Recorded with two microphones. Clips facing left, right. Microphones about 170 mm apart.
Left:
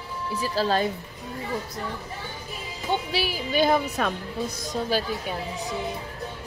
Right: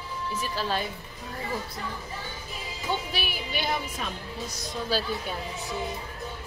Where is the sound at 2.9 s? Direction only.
20° left (ahead or behind).